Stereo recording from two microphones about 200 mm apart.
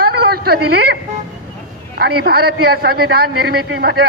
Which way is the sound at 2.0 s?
50° right (ahead or behind).